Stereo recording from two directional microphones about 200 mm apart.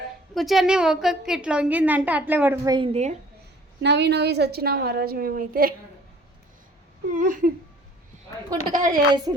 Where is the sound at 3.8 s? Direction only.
60° right (ahead or behind).